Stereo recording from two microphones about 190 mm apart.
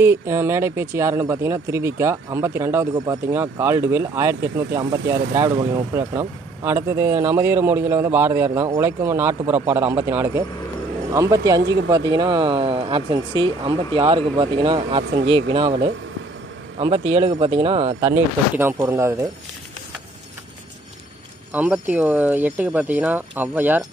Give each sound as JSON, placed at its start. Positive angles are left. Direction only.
{"t": 0.0, "sound": "speech", "side_deg": -15}
{"t": 18.1, "sound": "speech", "side_deg": -10}
{"t": 21.5, "sound": "speech", "side_deg": -5}